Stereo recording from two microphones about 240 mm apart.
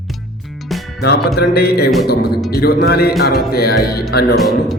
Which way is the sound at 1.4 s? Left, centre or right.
Left.